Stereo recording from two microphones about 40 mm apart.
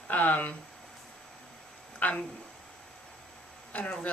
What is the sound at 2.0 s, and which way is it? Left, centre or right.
Speech, left.